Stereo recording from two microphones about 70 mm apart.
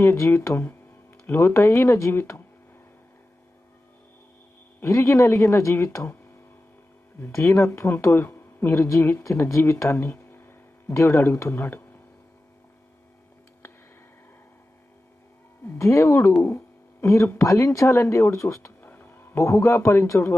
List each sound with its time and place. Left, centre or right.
0.0 s speech: left
4.8 s speech: left
7.2 s speech: left
9.8 s a sound: left
10.9 s speech: left
15.8 s speech: left
16.4 s a sound: left
17.3 s speech: left
18.8 s a sound: left
19.4 s speech: left